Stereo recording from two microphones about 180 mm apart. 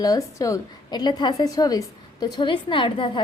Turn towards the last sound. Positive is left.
turn(degrees=25)  # may be behind; listen again after turning